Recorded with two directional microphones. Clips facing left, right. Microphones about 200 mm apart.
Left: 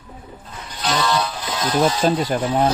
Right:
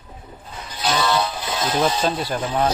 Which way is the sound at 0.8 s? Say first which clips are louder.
Even; 5° right (ahead or behind).